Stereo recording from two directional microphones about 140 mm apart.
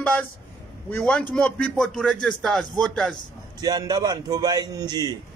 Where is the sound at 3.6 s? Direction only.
30° right (ahead or behind).